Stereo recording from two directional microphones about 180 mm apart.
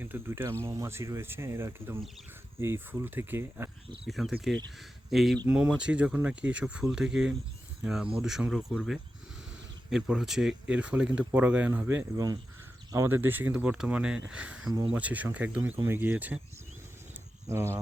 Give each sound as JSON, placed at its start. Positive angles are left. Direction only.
{"t": 0.0, "sound": "speech", "side_deg": -10}
{"t": 4.0, "sound": "speech", "side_deg": 0}
{"t": 14.7, "sound": "speech", "side_deg": -20}
{"t": 14.9, "sound": "speech", "side_deg": -10}
{"t": 17.4, "sound": "speech", "side_deg": -15}